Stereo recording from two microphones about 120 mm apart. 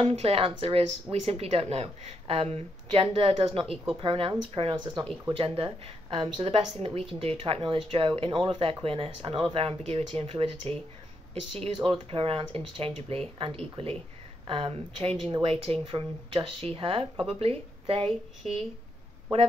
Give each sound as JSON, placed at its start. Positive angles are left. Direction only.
{"t": 0.0, "sound": "speech", "side_deg": -60}